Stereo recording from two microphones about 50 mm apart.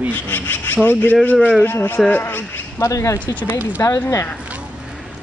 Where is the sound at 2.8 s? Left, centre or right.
Left.